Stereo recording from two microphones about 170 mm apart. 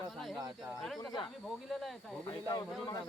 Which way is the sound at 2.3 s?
25° left (ahead or behind).